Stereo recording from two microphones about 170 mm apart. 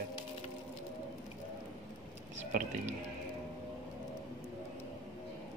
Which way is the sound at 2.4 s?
50° right (ahead or behind).